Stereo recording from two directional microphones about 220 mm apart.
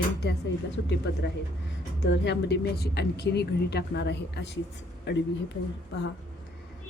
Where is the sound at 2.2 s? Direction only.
50° left (ahead or behind).